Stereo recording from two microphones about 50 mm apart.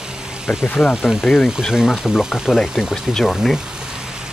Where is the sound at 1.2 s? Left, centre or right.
Centre.